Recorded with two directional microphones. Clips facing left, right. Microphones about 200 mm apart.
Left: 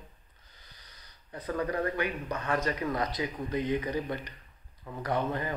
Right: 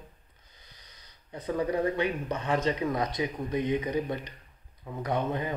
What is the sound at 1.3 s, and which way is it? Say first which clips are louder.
Speech: right 3 dB; 25° right (ahead or behind).